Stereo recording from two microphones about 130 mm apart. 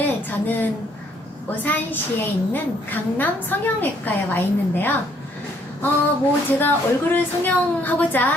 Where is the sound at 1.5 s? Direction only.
15° left (ahead or behind).